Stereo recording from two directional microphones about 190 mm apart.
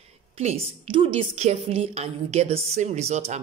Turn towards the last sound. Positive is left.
turn(degrees=-35)  # may be behind; listen again after turning